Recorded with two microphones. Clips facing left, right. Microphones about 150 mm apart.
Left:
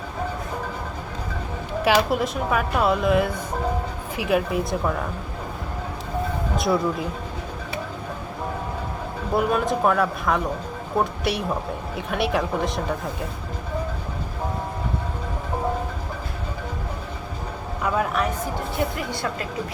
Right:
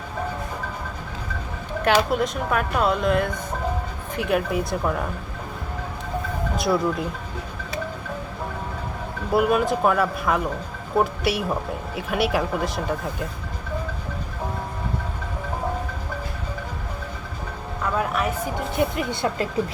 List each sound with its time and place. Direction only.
1.8 s speech: 5° left (ahead or behind)
6.6 s speech: centre (ahead or behind)
9.3 s speech: 5° right (ahead or behind)
17.9 s a sound: centre (ahead or behind)
18.8 s a woman's voice: 25° right (ahead or behind)